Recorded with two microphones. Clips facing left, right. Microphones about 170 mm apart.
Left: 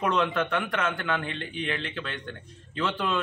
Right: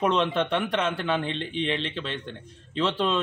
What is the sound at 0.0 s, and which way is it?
Speech, 25° right (ahead or behind).